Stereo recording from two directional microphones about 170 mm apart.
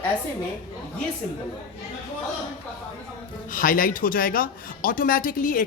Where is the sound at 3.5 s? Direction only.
55° left (ahead or behind).